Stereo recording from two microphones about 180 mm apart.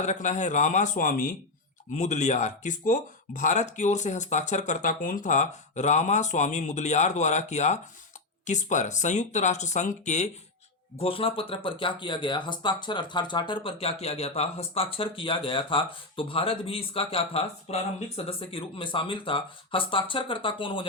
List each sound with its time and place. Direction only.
0.0 s speech: 40° left (ahead or behind)